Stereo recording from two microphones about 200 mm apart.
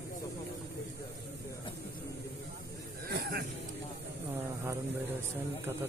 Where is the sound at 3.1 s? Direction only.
50° right (ahead or behind).